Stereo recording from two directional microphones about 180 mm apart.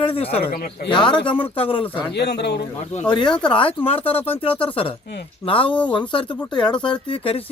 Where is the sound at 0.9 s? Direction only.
25° left (ahead or behind).